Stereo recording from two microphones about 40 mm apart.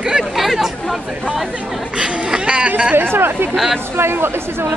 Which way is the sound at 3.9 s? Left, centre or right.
Right.